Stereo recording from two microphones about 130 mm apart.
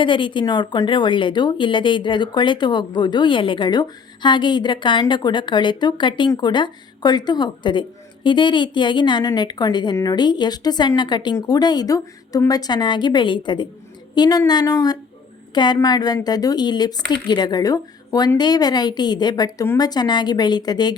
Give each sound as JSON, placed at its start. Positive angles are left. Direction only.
{"t": 0.0, "sound": "a woman's voice", "side_deg": 40}